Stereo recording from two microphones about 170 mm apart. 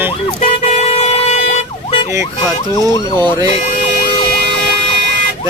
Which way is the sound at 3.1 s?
25° right (ahead or behind).